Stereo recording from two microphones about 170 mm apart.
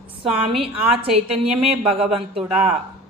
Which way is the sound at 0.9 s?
35° right (ahead or behind).